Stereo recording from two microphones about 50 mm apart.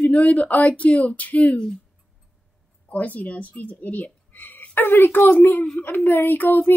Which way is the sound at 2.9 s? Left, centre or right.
Left.